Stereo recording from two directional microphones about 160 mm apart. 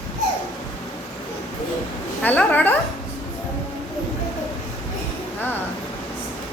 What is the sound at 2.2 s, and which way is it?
Speech, 10° left (ahead or behind).